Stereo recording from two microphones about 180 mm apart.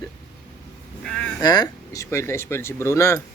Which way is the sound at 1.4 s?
20° left (ahead or behind).